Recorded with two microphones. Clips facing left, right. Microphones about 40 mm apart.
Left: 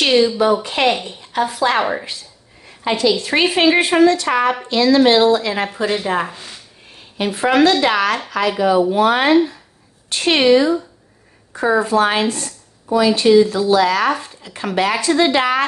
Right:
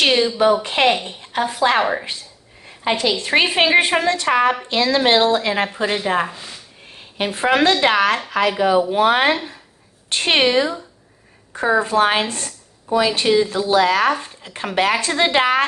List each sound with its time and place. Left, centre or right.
0.0 s a woman's voice: centre
1.8 s a woman's voice: centre
2.8 s a woman's voice: right
6.2 s speech: centre
7.2 s a woman's voice: right
11.8 s speech: right